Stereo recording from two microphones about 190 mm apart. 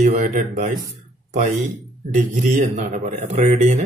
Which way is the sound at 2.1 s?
40° right (ahead or behind).